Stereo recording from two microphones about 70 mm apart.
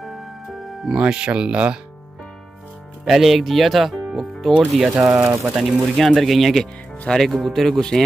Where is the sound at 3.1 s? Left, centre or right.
Centre.